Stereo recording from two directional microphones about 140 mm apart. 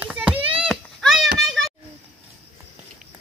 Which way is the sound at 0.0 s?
10° right (ahead or behind).